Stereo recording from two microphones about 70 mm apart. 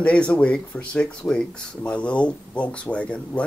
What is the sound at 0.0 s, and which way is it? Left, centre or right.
Speech, centre.